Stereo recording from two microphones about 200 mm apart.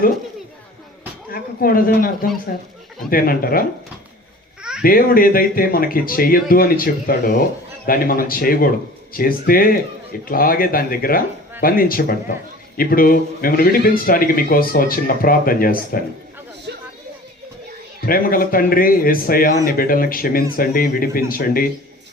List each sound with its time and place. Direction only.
1.3 s a man's voice: 45° left (ahead or behind)
4.8 s a man's voice: 45° left (ahead or behind)
16.7 s a sound: 60° right (ahead or behind)
18.0 s a man's voice: 45° left (ahead or behind)